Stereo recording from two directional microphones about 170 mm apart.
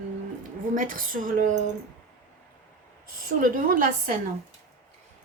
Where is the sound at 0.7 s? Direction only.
55° right (ahead or behind).